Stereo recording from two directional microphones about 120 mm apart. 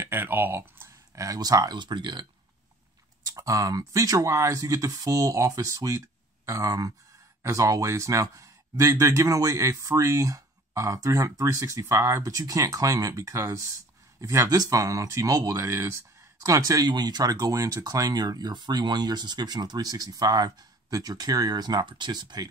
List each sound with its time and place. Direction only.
0.0 s speech: 20° right (ahead or behind); by 2.2 s 40° right (ahead or behind)
3.3 s speech: 30° right (ahead or behind)